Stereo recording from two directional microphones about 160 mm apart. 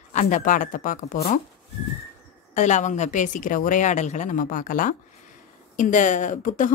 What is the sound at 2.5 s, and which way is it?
A woman's voice, 50° left (ahead or behind).